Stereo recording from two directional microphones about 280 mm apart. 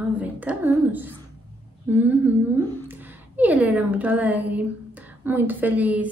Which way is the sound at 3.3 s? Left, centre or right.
Centre.